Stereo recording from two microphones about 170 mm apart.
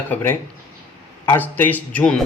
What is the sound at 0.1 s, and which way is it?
Speech, 10° left (ahead or behind).